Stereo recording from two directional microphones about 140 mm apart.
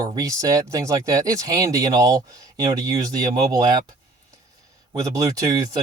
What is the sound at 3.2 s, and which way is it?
Speech, 30° right (ahead or behind).